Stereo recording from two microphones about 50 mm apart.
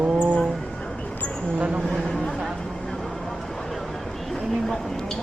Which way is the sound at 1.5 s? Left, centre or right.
Right.